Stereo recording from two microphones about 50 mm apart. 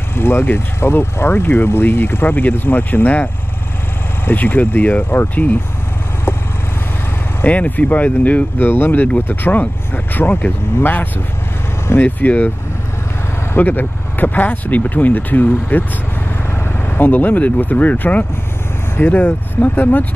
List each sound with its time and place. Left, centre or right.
0.1 s speech: left
4.3 s speech: left
7.4 s speech: left
13.6 s speech: left
16.9 s speech: left